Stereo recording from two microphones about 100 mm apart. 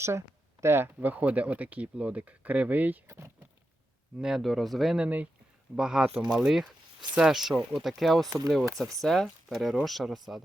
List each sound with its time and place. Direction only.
0.0 s speech: 30° right (ahead or behind)
4.2 s speech: 5° right (ahead or behind)
5.0 s speech: 15° right (ahead or behind); by 8.3 s centre (ahead or behind)
8.3 s speech: 40° right (ahead or behind)
9.0 s speech: 5° left (ahead or behind)